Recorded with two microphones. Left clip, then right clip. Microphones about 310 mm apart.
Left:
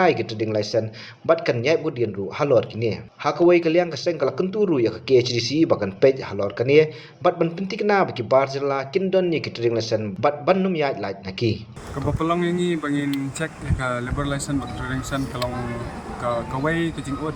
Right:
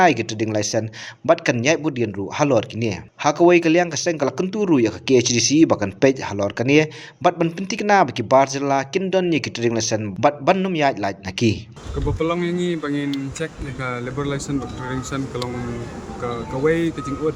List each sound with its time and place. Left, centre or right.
0.0 s speech: right
12.2 s speech: centre
16.6 s speech: centre